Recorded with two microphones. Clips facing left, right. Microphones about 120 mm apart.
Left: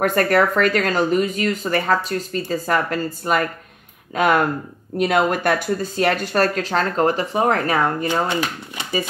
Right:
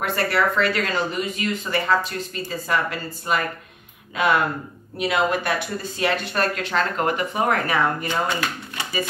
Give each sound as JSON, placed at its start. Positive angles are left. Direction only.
{"t": 0.0, "sound": "speech", "side_deg": 45}